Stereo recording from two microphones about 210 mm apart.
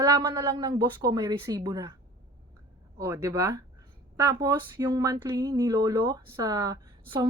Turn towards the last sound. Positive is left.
turn(degrees=-20)  # may be behind; listen again after turning